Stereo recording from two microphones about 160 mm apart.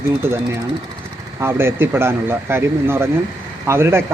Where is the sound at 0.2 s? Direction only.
15° right (ahead or behind).